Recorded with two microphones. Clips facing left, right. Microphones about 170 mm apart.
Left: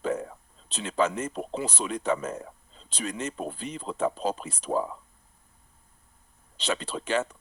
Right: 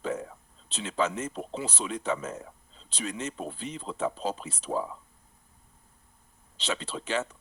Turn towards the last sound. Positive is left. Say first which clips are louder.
# left 3 dB
turn(degrees=50)  # may be behind; listen again after turning